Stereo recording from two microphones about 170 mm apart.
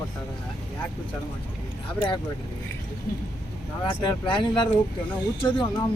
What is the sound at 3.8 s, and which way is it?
Speech, 25° left (ahead or behind).